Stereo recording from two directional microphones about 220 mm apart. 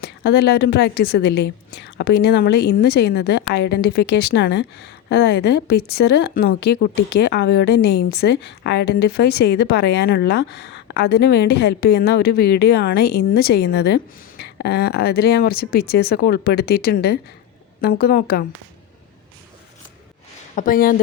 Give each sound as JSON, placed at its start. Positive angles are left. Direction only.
{"t": 0.0, "sound": "speech", "side_deg": 45}
{"t": 20.6, "sound": "speech", "side_deg": 40}